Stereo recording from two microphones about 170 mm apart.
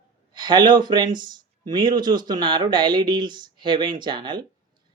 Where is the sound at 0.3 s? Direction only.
25° right (ahead or behind).